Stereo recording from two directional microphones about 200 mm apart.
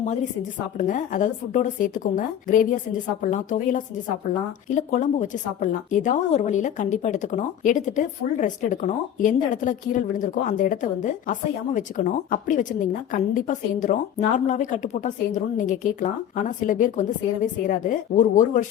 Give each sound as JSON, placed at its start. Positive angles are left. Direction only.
{"t": 0.8, "sound": "a woman's voice", "side_deg": 40}